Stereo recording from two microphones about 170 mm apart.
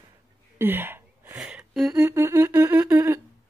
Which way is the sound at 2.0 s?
15° right (ahead or behind).